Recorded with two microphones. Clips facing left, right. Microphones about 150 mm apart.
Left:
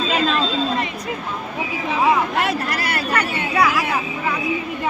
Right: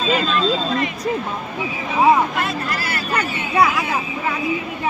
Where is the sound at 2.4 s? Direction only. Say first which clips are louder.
Left 2 dB; 70° left (ahead or behind).